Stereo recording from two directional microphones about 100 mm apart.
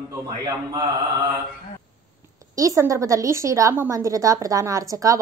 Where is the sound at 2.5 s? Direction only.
35° right (ahead or behind).